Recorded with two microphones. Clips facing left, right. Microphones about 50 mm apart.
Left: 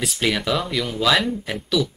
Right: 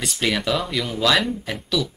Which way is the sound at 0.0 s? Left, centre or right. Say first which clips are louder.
Left 1 dB; centre.